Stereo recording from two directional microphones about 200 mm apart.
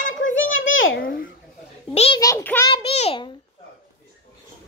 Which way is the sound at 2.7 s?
30° left (ahead or behind).